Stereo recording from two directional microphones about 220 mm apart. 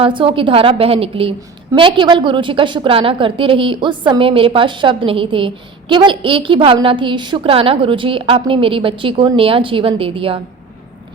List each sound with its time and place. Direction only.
0.0 s a woman's voice: 25° right (ahead or behind)